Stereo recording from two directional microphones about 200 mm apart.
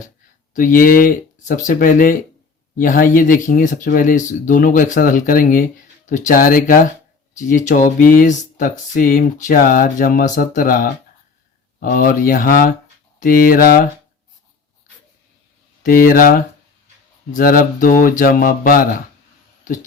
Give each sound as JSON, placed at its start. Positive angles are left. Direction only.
{"t": 0.5, "sound": "speech", "side_deg": 45}
{"t": 15.8, "sound": "speech", "side_deg": 45}